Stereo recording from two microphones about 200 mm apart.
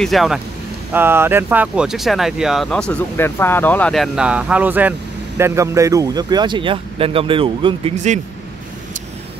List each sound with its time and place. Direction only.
0.0 s speech: centre (ahead or behind)
0.9 s speech: 10° right (ahead or behind); by 8.2 s 35° right (ahead or behind)